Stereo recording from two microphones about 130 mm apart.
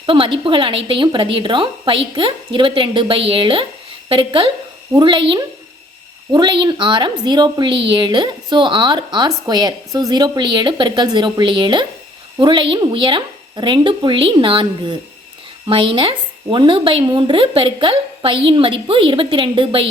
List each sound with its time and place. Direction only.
0.0 s a woman's voice: 40° right (ahead or behind)